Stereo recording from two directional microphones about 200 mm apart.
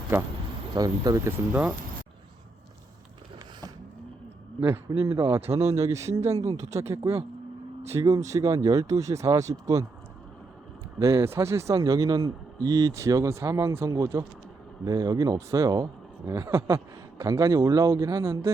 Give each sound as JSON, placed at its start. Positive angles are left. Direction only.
{"t": 0.1, "sound": "speech", "side_deg": -10}
{"t": 5.1, "sound": "speech", "side_deg": -25}
{"t": 5.6, "sound": "speech", "side_deg": -15}
{"t": 11.0, "sound": "speech", "side_deg": -15}